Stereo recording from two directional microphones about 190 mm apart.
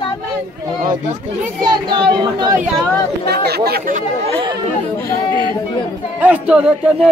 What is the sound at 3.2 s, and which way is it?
Speech, 60° right (ahead or behind).